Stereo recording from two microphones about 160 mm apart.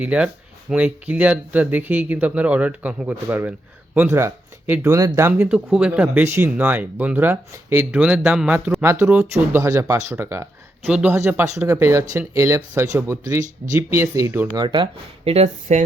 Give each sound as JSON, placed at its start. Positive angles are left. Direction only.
{"t": 0.0, "sound": "speech", "side_deg": -10}
{"t": 14.5, "sound": "speech", "side_deg": -30}